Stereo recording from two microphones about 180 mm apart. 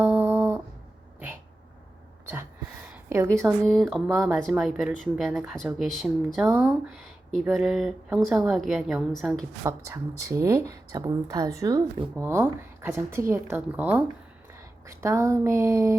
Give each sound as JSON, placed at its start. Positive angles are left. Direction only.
{"t": 0.0, "sound": "a sound", "side_deg": -10}
{"t": 2.2, "sound": "a sound", "side_deg": -10}
{"t": 3.2, "sound": "speech", "side_deg": 5}
{"t": 6.4, "sound": "speech", "side_deg": -15}
{"t": 7.4, "sound": "speech", "side_deg": 0}
{"t": 9.6, "sound": "speech", "side_deg": -15}